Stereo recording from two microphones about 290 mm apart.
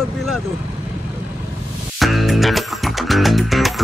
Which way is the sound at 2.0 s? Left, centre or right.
Centre.